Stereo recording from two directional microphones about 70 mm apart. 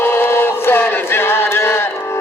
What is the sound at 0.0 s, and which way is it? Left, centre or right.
Chant, left.